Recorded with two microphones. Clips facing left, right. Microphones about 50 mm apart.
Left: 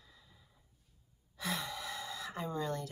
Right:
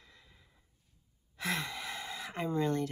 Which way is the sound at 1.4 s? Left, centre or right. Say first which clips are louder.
Right 3 dB; right.